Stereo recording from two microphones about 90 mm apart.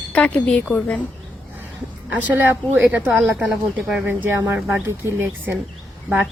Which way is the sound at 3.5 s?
Centre (ahead or behind).